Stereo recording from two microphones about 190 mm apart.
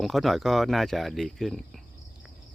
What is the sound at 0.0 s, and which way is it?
Speech, centre (ahead or behind).